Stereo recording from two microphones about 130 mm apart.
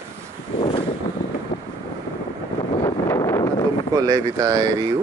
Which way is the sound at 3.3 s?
25° left (ahead or behind).